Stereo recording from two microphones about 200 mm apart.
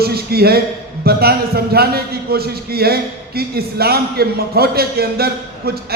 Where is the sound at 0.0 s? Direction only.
50° right (ahead or behind).